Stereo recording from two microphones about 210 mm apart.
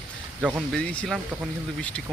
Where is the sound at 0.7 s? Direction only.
5° left (ahead or behind).